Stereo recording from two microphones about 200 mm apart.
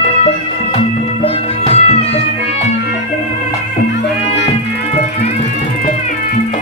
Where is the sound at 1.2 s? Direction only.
30° left (ahead or behind).